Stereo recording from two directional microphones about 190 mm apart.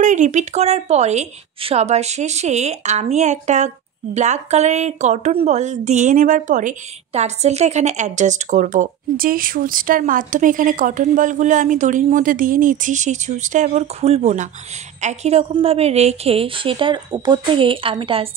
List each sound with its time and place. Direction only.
0.0 s a woman's voice: 40° right (ahead or behind)